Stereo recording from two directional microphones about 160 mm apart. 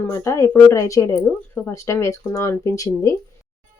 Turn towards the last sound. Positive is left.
turn(degrees=20)  # may be behind; listen again after turning